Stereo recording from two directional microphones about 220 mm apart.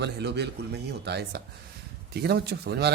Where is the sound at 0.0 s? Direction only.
50° right (ahead or behind).